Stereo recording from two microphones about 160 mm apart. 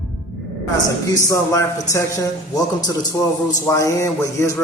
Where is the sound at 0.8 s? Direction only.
20° left (ahead or behind).